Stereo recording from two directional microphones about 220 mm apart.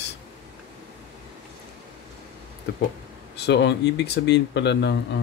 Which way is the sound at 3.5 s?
50° left (ahead or behind).